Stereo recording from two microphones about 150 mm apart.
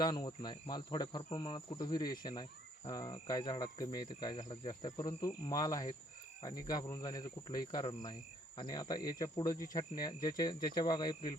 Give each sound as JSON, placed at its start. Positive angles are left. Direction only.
{"t": 0.0, "sound": "speech", "side_deg": 30}